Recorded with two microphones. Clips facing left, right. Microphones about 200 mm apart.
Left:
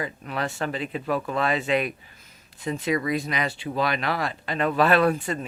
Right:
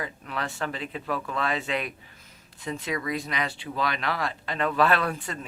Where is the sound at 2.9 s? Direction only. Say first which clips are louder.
Left 5 dB; 10° left (ahead or behind).